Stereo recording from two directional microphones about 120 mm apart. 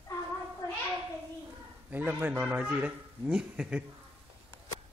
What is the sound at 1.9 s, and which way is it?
A man's voice, 15° right (ahead or behind).